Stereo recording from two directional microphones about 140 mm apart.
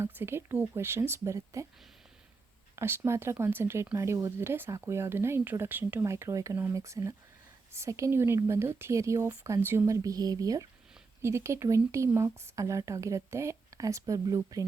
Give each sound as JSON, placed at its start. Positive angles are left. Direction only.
{"t": 0.0, "sound": "speech", "side_deg": -15}
{"t": 2.7, "sound": "speech", "side_deg": -15}